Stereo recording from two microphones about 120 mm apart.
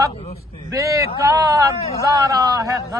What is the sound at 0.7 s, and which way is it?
Speech, 25° right (ahead or behind).